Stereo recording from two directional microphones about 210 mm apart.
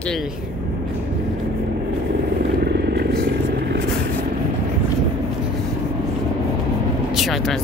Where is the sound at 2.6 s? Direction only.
50° right (ahead or behind).